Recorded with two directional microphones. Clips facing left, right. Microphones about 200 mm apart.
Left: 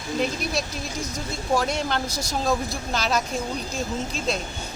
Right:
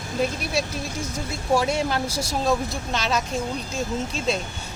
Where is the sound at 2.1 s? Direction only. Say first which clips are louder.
Right 3 dB; 25° right (ahead or behind).